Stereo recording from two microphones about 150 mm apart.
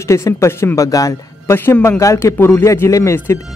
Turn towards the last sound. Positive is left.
turn(degrees=20)  # may be behind; listen again after turning